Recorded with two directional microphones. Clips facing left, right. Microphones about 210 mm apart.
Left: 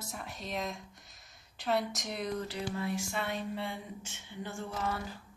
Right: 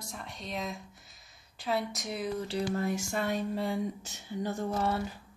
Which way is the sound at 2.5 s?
40° right (ahead or behind).